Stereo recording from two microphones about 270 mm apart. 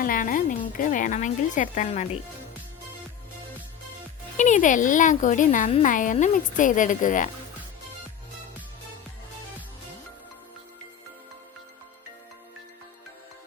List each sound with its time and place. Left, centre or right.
0.0 s speech: left
4.4 s speech: left